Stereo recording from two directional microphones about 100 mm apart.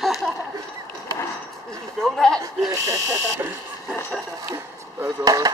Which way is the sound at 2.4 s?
30° right (ahead or behind).